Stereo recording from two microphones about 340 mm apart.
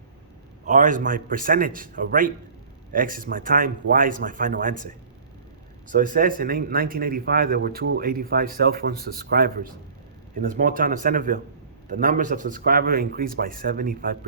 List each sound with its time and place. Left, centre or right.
0.7 s speech: right
5.9 s speech: right